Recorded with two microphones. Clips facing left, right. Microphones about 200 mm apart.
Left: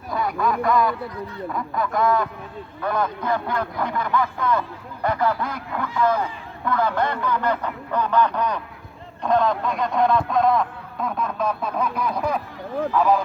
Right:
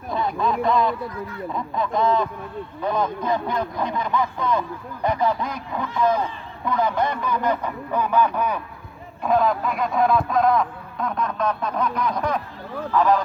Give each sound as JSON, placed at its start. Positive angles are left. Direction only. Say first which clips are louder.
{"t": 0.1, "sound": "speech", "louder": "even", "side_deg": -25}